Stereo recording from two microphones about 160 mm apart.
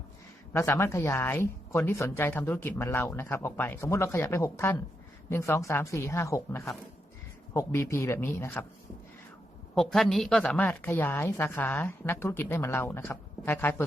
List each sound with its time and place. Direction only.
0.5 s a woman's voice: 15° left (ahead or behind)
9.7 s a woman's voice: 5° left (ahead or behind)